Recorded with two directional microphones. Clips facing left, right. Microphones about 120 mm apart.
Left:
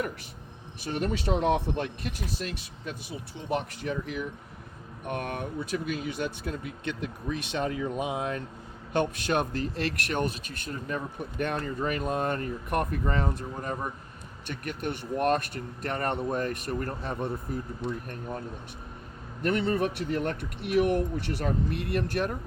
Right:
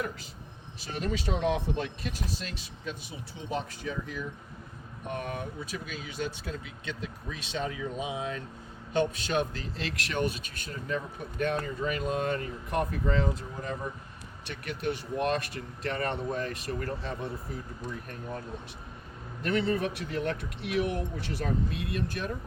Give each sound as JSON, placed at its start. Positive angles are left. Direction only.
{"t": 0.8, "sound": "speech", "side_deg": 55}
{"t": 3.5, "sound": "speech", "side_deg": 65}
{"t": 19.4, "sound": "speech", "side_deg": 55}